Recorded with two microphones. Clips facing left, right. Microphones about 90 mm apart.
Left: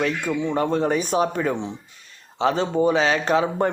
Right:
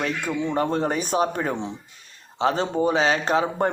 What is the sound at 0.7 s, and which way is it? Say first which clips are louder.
Speech: left 2 dB; 40° right (ahead or behind).